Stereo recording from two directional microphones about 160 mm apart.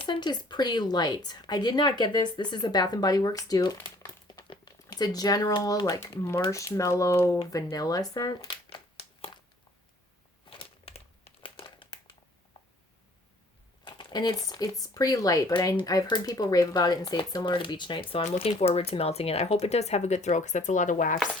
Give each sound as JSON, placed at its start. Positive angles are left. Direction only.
{"t": 0.0, "sound": "a woman's voice", "side_deg": 30}
{"t": 7.5, "sound": "crumpling", "side_deg": 20}
{"t": 10.5, "sound": "a sound", "side_deg": 35}
{"t": 11.4, "sound": "crumpling", "side_deg": 30}
{"t": 13.8, "sound": "a woman's voice", "side_deg": 25}
{"t": 18.2, "sound": "speech", "side_deg": 45}